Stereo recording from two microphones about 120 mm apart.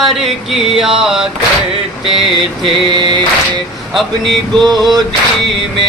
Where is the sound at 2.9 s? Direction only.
40° right (ahead or behind).